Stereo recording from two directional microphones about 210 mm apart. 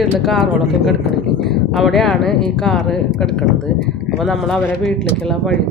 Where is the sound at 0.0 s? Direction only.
Centre (ahead or behind).